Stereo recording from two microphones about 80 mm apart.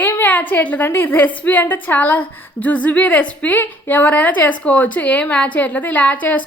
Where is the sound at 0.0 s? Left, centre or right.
Left.